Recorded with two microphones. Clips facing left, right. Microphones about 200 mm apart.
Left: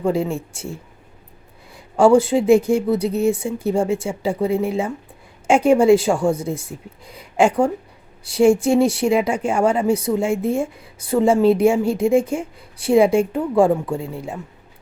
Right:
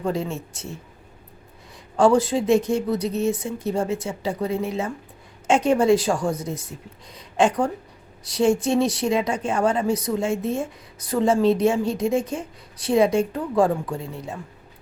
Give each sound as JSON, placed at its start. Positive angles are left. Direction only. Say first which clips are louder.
{"t": 0.1, "sound": "speech", "louder": "left 5 dB", "side_deg": 30}
{"t": 2.0, "sound": "speech", "louder": "left 5 dB", "side_deg": 25}
{"t": 8.5, "sound": "speech", "louder": "left 5 dB", "side_deg": 30}
{"t": 9.3, "sound": "speech", "louder": "left 4 dB", "side_deg": 10}
{"t": 9.7, "sound": "speech", "louder": "left 4 dB", "side_deg": 25}